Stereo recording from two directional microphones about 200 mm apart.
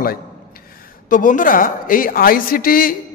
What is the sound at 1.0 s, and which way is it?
A man's voice, 40° left (ahead or behind).